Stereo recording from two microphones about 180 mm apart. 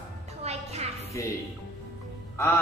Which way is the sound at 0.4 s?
35° right (ahead or behind).